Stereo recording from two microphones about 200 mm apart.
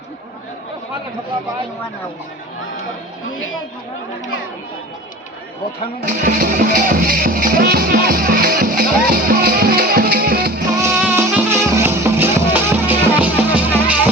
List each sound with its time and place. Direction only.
6.1 s speech: 45° right (ahead or behind)
10.8 s music: 15° right (ahead or behind)